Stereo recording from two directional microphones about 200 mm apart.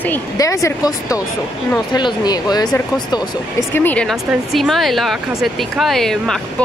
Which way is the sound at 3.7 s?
5° left (ahead or behind).